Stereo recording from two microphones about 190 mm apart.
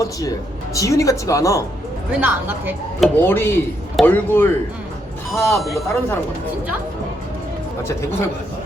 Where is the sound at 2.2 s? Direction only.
10° right (ahead or behind).